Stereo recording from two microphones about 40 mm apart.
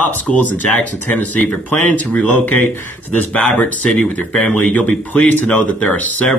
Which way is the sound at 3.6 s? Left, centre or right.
Left.